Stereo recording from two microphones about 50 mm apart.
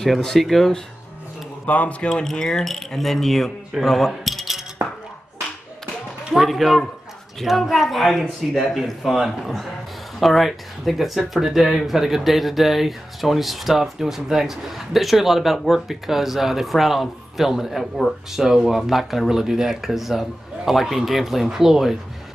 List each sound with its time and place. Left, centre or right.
0.2 s speech: centre
1.7 s speech: left; by 4.1 s centre
4.1 s a sound: centre
4.8 s chink: right
6.3 s speech: centre